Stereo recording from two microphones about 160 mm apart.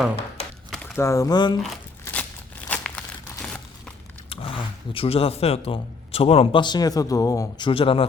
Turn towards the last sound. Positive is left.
turn(degrees=35)  # may be behind; listen again after turning